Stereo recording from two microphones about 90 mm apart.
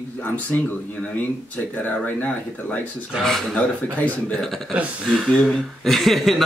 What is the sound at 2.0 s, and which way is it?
Speech, 20° left (ahead or behind).